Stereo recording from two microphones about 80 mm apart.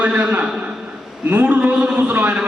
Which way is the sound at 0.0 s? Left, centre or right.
Centre.